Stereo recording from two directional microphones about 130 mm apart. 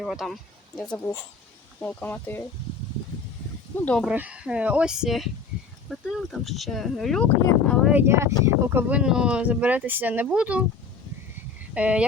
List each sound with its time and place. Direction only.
0.0 s speech: centre (ahead or behind); by 2.5 s 15° left (ahead or behind)
3.8 s speech: 10° left (ahead or behind)
4.1 s speech: 10° right (ahead or behind)
7.9 s speech: 15° right (ahead or behind)
8.9 s speech: 5° right (ahead or behind)
11.7 s speech: 10° right (ahead or behind)